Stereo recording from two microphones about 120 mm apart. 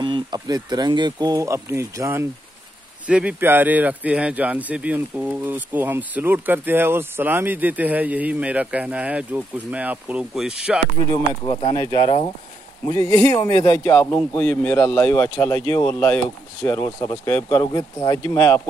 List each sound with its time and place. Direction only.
0.0 s speech: 40° right (ahead or behind); by 2.2 s 25° right (ahead or behind)
3.1 s speech: 10° right (ahead or behind)
11.1 s speech: 45° left (ahead or behind)
12.9 s speech: 25° left (ahead or behind)
14.4 s speech: 10° left (ahead or behind); by 18.2 s 25° left (ahead or behind)